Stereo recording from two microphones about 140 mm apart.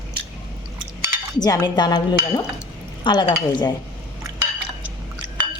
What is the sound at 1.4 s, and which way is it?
Speech, 30° left (ahead or behind).